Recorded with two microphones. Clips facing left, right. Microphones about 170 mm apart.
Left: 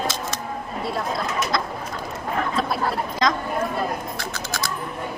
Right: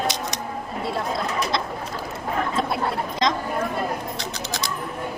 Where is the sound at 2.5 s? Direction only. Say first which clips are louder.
Even; 25° right (ahead or behind).